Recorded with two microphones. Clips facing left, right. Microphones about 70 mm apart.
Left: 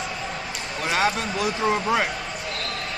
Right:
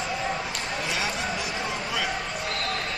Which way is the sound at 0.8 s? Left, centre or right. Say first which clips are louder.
Left 9 dB; left.